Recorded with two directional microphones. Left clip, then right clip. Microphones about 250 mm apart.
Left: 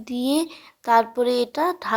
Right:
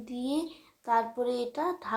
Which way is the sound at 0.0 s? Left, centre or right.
Left.